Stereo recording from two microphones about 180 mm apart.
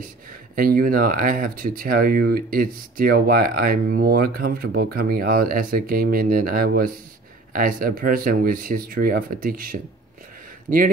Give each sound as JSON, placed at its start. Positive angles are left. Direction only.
{"t": 0.0, "sound": "speech", "side_deg": -50}